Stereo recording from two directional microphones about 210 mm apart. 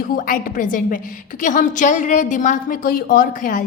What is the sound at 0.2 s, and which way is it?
A woman's voice, 40° left (ahead or behind).